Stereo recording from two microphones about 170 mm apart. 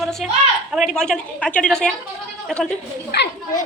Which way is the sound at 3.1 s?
75° left (ahead or behind).